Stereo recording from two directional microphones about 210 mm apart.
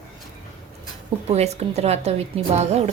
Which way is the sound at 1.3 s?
30° right (ahead or behind).